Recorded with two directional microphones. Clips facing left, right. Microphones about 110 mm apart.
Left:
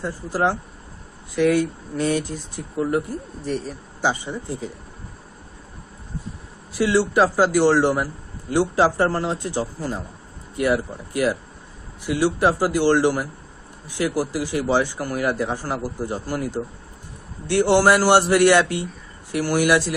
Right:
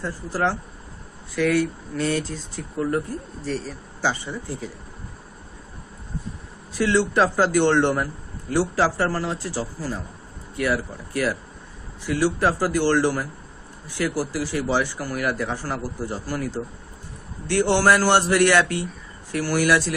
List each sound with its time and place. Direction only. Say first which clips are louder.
0.0 s a man's voice: left 2 dB; 15° left (ahead or behind)
6.8 s a man's voice: left 2 dB; 10° left (ahead or behind)